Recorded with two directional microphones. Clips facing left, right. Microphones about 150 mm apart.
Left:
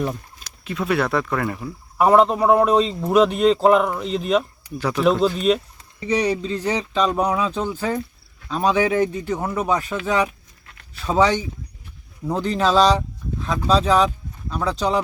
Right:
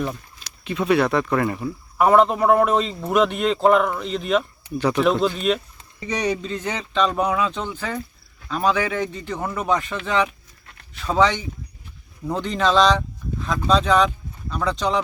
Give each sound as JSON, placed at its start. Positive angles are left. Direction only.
{"t": 0.6, "sound": "a man's voice", "side_deg": 0}
{"t": 2.6, "sound": "a man's voice", "side_deg": -5}
{"t": 8.6, "sound": "speech", "side_deg": 20}
{"t": 9.0, "sound": "a man's voice", "side_deg": 10}